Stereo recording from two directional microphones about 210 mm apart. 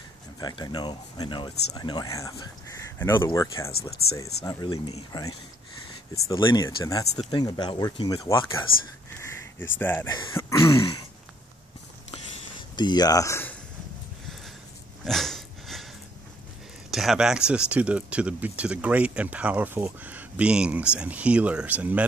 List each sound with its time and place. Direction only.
0.4 s speech: 20° left (ahead or behind)
1.7 s throat clearing: 20° left (ahead or behind)
4.0 s speech: 45° left (ahead or behind)
4.5 s throat clearing: 15° left (ahead or behind)
6.2 s throat clearing: 20° left (ahead or behind)
7.2 s speech: 20° left (ahead or behind)
10.1 s throat clearing: 15° left (ahead or behind)
12.7 s speech: 20° left (ahead or behind)
15.0 s a sound: centre (ahead or behind)
16.9 s speech: centre (ahead or behind)